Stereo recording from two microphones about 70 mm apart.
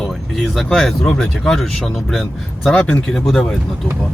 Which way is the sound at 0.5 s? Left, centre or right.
Centre.